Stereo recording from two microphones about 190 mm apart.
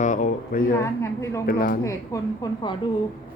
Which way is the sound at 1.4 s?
50° left (ahead or behind).